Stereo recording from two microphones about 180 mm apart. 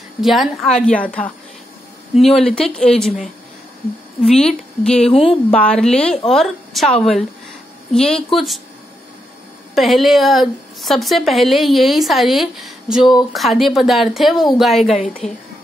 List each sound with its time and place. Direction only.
0.2 s a woman's voice: centre (ahead or behind)
4.4 s a woman's voice: 5° left (ahead or behind)
5.0 s speech: 30° left (ahead or behind)
5.5 s a woman's voice: 5° left (ahead or behind)
9.8 s a woman's voice: centre (ahead or behind)